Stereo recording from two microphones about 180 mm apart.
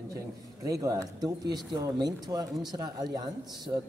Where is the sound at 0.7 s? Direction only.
20° right (ahead or behind).